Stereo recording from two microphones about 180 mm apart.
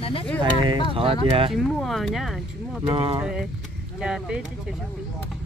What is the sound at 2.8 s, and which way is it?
Speech, 30° right (ahead or behind).